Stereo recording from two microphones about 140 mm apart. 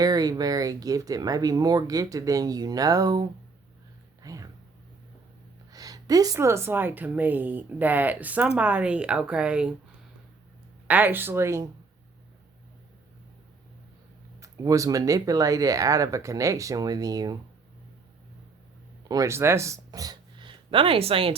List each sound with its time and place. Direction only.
0.0 s speech: 25° right (ahead or behind)
4.2 s a sound: 25° right (ahead or behind)
5.7 s a woman's voice: 25° right (ahead or behind); by 9.7 s 10° right (ahead or behind)
10.8 s a woman's voice: 10° right (ahead or behind)
14.3 s speech: 25° right (ahead or behind)
19.0 s speech: 25° right (ahead or behind); by 21.3 s 40° right (ahead or behind)